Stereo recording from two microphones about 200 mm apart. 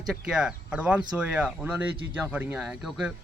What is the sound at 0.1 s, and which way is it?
Speech, 5° right (ahead or behind).